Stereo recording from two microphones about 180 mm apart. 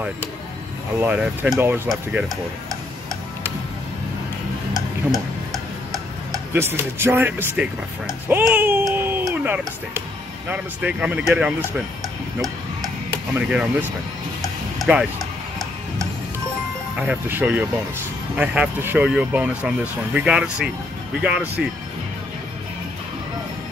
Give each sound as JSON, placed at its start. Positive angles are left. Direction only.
{"t": 0.9, "sound": "speech", "side_deg": -10}
{"t": 5.1, "sound": "tick-tock", "side_deg": 0}
{"t": 6.3, "sound": "speech", "side_deg": -15}
{"t": 13.4, "sound": "speech", "side_deg": -5}
{"t": 14.8, "sound": "music", "side_deg": 0}
{"t": 17.0, "sound": "speech", "side_deg": -10}